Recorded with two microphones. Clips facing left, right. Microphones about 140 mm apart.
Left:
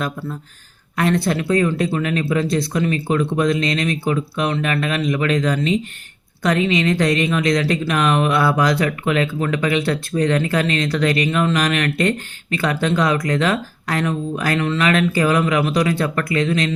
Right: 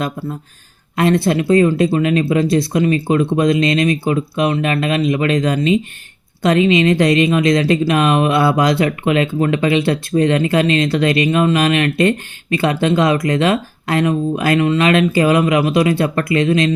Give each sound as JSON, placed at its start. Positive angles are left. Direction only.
{"t": 0.0, "sound": "speech", "side_deg": -25}